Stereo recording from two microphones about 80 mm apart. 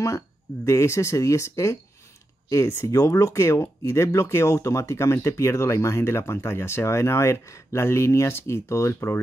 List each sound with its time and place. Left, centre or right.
0.7 s speech: left
2.9 s speech: left